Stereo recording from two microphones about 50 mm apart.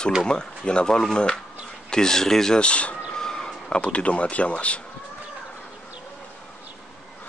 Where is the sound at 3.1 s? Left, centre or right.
Centre.